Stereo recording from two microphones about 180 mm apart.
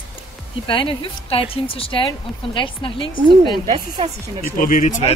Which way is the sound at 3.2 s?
25° right (ahead or behind).